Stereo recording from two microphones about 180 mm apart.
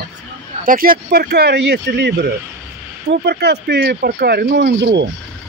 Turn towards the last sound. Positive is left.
turn(degrees=-70)  # may be behind; listen again after turning